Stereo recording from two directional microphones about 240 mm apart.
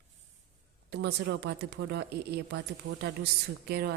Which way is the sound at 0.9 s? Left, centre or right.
Right.